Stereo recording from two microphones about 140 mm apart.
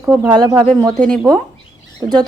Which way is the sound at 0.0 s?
20° right (ahead or behind).